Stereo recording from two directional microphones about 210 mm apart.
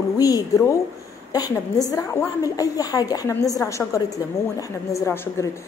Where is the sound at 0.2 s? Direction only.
15° left (ahead or behind).